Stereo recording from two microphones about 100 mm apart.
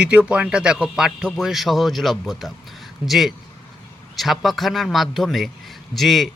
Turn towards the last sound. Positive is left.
turn(degrees=0)  # may be behind; listen again after turning